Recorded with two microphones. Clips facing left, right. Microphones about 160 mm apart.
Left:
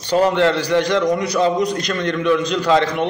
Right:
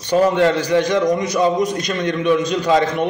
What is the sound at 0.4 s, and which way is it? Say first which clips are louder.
A man's voice: right 1 dB; 15° right (ahead or behind).